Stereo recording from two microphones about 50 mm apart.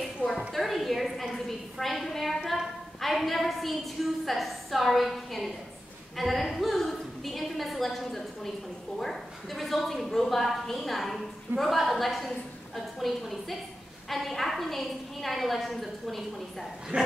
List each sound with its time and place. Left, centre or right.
0.5 s a woman's voice: centre
16.9 s dog: right